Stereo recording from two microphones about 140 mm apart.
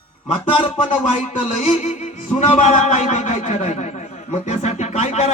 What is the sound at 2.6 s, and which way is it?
Speech, 55° left (ahead or behind).